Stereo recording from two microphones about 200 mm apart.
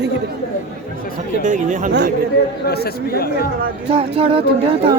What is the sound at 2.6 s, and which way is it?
Speech, 50° left (ahead or behind).